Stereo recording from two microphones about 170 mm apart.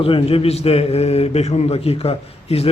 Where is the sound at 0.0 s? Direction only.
35° left (ahead or behind).